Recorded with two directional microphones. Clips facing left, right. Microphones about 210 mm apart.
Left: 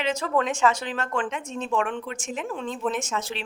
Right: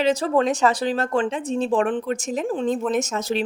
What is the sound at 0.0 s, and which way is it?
Speech, 35° right (ahead or behind).